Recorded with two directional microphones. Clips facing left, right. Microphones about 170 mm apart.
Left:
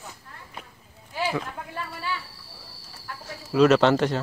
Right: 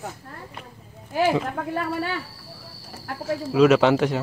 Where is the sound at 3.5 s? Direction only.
5° right (ahead or behind).